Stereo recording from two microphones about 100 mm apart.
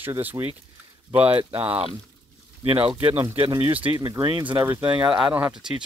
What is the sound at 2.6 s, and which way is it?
Speech, 60° right (ahead or behind).